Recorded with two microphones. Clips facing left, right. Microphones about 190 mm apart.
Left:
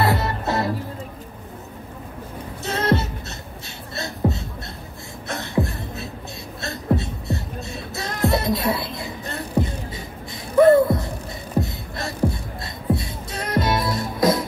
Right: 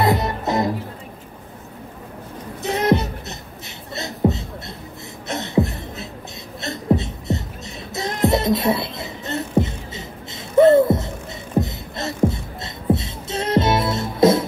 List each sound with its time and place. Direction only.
0.0 s music: 20° right (ahead or behind)
2.6 s music: 15° right (ahead or behind)
3.9 s beatboxing: 20° right (ahead or behind)
5.3 s a sound: 20° right (ahead or behind)
6.6 s music: 20° right (ahead or behind)
11.6 s heart sounds: 20° right (ahead or behind)
12.9 s music: 25° right (ahead or behind)